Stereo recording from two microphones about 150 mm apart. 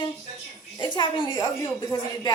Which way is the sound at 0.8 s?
30° left (ahead or behind).